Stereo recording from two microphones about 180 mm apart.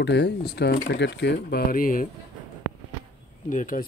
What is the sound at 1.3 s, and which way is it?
Speech, 50° left (ahead or behind).